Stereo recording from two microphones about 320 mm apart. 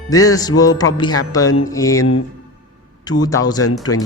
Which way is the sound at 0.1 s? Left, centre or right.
Centre.